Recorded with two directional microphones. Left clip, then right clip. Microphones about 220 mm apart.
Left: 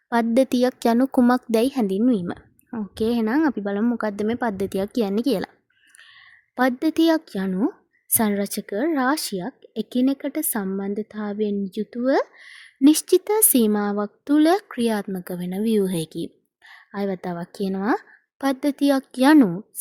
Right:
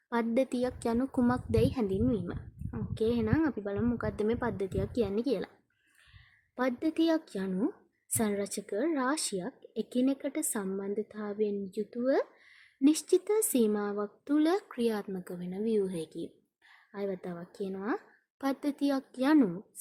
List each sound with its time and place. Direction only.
0.1 s a woman's voice: 40° left (ahead or behind)